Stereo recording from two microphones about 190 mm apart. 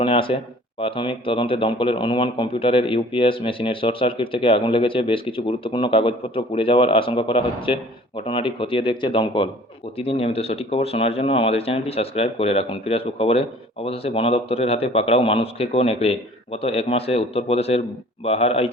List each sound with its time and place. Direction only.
0.0 s speech: 30° left (ahead or behind)